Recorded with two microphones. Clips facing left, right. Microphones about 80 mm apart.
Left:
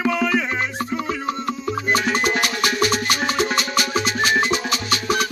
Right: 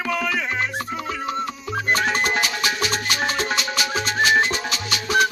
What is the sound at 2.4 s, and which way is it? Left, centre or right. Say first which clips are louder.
Music: left 3 dB; left.